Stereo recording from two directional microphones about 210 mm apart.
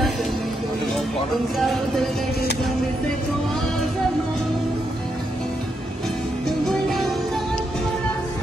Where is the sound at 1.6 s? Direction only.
Centre (ahead or behind).